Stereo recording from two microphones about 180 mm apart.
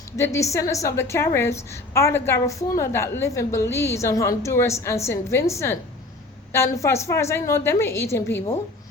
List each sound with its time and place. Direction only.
0.2 s a woman's voice: 15° left (ahead or behind)